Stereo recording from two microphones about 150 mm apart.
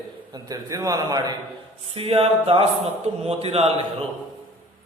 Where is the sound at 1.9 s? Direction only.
40° right (ahead or behind).